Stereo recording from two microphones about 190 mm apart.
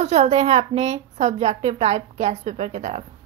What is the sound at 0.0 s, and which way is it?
A woman's voice, 35° right (ahead or behind).